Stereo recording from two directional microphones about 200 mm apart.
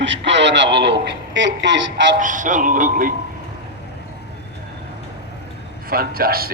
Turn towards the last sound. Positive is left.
turn(degrees=-50)  # may be behind; listen again after turning